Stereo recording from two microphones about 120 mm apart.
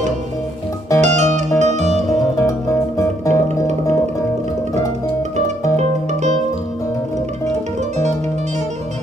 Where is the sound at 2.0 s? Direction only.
25° left (ahead or behind).